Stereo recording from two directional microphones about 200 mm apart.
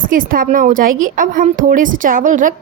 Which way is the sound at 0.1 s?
45° right (ahead or behind).